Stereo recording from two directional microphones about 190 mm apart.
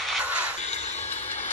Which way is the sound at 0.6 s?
35° left (ahead or behind).